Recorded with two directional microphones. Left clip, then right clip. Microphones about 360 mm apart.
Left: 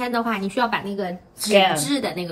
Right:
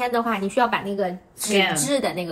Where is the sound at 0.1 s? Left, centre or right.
Centre.